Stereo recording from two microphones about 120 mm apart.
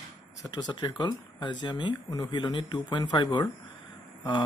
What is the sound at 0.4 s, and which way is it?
Speech, 35° left (ahead or behind).